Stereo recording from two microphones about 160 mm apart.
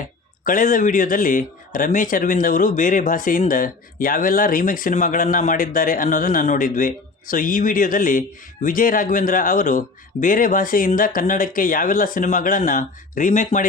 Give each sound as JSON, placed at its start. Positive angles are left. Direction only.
{"t": 0.4, "sound": "a man's voice", "side_deg": 55}